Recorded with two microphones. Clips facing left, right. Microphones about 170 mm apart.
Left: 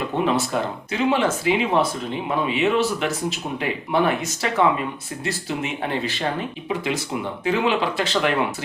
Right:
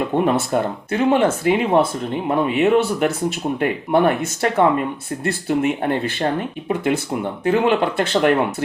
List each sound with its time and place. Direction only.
0.3 s speech: 55° right (ahead or behind)